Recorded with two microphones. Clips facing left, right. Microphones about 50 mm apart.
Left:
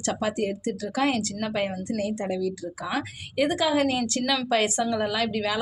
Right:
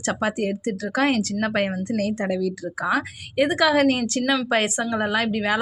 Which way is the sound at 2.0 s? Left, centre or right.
Right.